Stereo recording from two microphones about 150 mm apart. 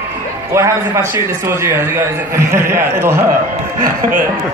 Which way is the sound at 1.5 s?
15° right (ahead or behind).